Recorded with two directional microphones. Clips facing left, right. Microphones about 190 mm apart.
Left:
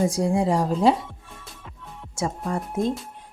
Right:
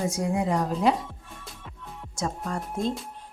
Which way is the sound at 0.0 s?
30° left (ahead or behind).